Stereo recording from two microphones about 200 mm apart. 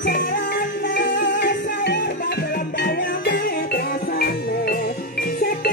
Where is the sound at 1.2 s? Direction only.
60° left (ahead or behind).